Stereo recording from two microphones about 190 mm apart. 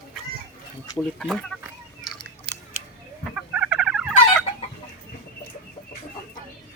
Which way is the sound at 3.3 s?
5° right (ahead or behind).